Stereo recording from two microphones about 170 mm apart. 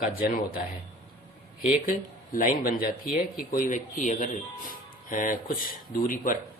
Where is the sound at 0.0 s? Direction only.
60° left (ahead or behind).